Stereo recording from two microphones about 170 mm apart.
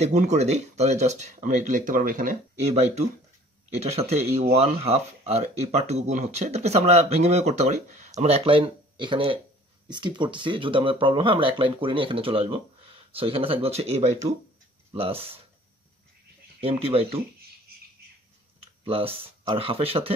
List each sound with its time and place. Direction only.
0.0 s speech: 40° right (ahead or behind)
16.6 s speech: 35° right (ahead or behind)
18.9 s speech: 35° right (ahead or behind)